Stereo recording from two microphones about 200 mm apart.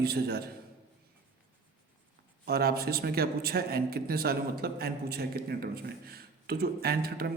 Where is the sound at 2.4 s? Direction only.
50° right (ahead or behind).